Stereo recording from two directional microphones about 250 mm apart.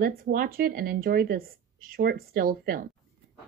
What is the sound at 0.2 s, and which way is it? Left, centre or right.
Speech, right.